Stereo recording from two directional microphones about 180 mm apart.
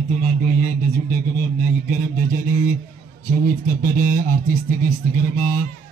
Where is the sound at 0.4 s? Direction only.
60° left (ahead or behind).